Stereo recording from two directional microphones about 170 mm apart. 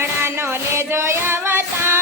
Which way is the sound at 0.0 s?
15° right (ahead or behind).